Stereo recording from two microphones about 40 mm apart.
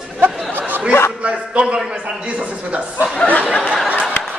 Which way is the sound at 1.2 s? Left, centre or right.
Right.